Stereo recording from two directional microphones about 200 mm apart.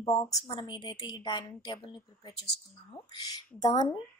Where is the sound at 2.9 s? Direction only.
20° left (ahead or behind).